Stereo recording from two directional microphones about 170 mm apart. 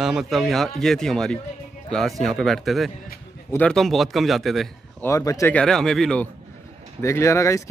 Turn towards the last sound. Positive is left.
turn(degrees=20)  # may be behind; listen again after turning